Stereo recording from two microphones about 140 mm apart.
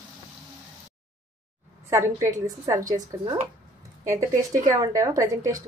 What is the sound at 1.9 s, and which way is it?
A woman's voice, 20° right (ahead or behind).